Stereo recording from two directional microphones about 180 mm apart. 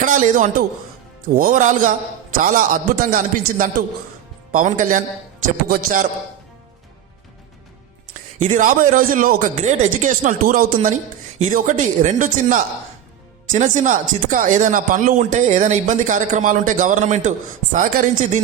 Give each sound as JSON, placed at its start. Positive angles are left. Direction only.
{"t": 0.0, "sound": "a man's voice", "side_deg": -45}
{"t": 8.4, "sound": "speech", "side_deg": -45}